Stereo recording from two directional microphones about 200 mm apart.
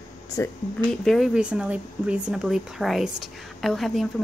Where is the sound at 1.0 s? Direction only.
Centre (ahead or behind).